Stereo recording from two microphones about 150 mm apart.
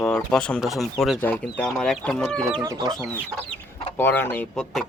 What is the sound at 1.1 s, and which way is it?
Speech, 10° left (ahead or behind).